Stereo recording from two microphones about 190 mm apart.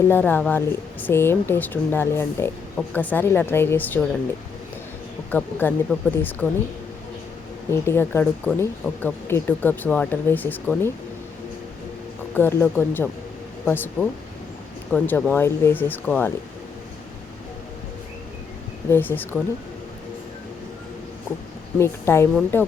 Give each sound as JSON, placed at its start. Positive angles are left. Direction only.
{"t": 0.1, "sound": "speech", "side_deg": 10}
{"t": 5.3, "sound": "speech", "side_deg": 10}
{"t": 7.7, "sound": "speech", "side_deg": 10}
{"t": 12.3, "sound": "speech", "side_deg": 10}
{"t": 18.9, "sound": "speech", "side_deg": 10}
{"t": 21.8, "sound": "speech", "side_deg": 15}